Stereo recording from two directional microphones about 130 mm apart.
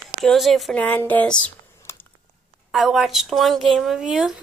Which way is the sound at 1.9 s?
20° left (ahead or behind).